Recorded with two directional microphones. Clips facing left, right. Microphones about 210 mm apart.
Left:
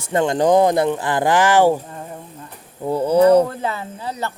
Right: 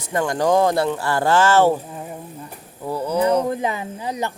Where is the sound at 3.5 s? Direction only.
15° right (ahead or behind).